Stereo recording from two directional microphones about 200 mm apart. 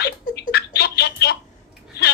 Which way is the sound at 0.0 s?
55° left (ahead or behind).